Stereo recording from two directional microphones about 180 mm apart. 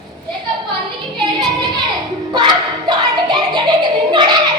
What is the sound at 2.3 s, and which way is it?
Clapping, 25° right (ahead or behind).